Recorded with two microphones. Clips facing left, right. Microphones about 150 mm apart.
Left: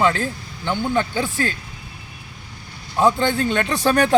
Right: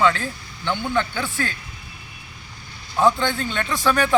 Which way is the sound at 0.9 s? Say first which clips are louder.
Left 3 dB; 40° left (ahead or behind).